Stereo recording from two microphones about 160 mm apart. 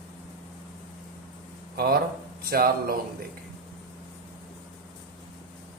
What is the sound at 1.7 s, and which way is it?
Speech, 70° right (ahead or behind).